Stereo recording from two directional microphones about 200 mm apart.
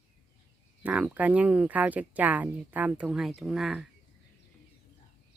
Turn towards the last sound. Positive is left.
turn(degrees=0)  # may be behind; listen again after turning